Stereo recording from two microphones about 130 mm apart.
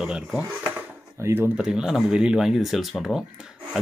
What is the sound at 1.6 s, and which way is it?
Speech, 5° right (ahead or behind).